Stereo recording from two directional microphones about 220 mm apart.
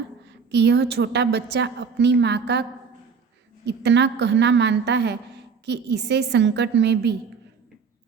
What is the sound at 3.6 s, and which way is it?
A woman's voice, 50° right (ahead or behind).